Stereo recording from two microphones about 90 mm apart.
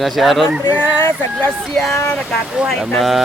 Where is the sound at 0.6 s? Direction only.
25° left (ahead or behind).